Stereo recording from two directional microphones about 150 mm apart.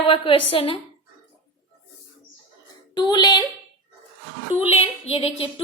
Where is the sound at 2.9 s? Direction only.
30° left (ahead or behind).